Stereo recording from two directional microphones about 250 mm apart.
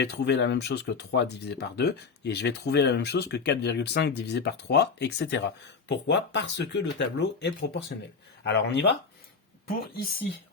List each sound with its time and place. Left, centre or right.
0.0 s speech: left